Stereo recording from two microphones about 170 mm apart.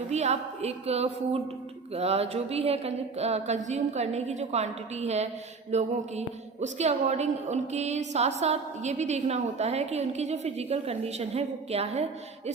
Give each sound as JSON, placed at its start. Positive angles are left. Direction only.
{"t": 0.1, "sound": "a woman's voice", "side_deg": -40}